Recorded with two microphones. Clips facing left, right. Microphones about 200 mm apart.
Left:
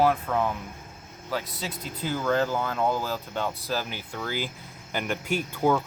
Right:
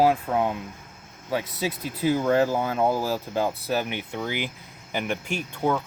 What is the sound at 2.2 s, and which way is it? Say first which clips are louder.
Speech: right 1 dB; 30° right (ahead or behind).